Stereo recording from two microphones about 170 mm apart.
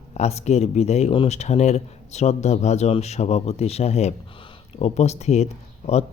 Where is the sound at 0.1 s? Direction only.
40° left (ahead or behind).